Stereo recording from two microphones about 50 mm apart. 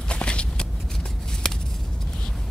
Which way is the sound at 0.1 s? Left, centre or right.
Left.